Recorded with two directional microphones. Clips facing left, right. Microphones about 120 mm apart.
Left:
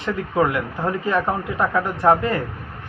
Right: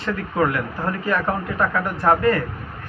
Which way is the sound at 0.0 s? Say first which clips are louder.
Left 1 dB; 20° left (ahead or behind).